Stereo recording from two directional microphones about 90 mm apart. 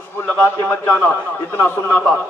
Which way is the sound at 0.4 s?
25° left (ahead or behind).